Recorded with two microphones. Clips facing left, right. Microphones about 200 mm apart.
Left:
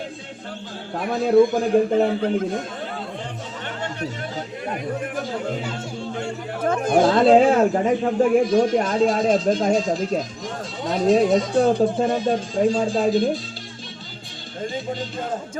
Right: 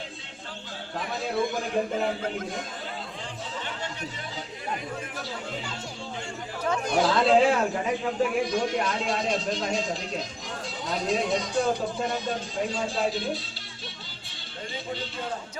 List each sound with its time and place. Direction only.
0.9 s a man's voice: 55° left (ahead or behind)
5.2 s a man's voice: 50° left (ahead or behind)
14.6 s a man's voice: 45° left (ahead or behind)